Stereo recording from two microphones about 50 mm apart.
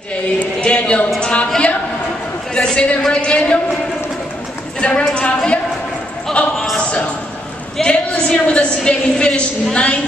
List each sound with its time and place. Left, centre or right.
0.6 s a woman's voice: left
1.2 s a sound: left
2.5 s a woman's voice: centre
4.7 s a woman's voice: centre
6.4 s a sound: left
7.8 s a woman's voice: centre